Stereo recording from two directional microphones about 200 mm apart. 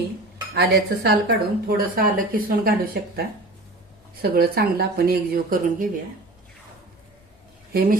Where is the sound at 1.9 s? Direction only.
45° right (ahead or behind).